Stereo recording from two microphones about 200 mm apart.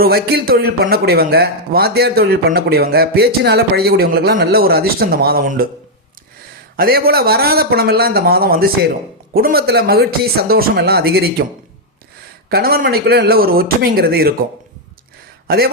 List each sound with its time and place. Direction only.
0.0 s a man's voice: 50° right (ahead or behind)
6.7 s a man's voice: 50° right (ahead or behind)
12.5 s a man's voice: 50° right (ahead or behind)
15.4 s speech: 50° right (ahead or behind)